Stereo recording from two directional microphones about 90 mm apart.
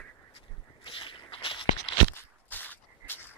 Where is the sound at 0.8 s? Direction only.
75° left (ahead or behind).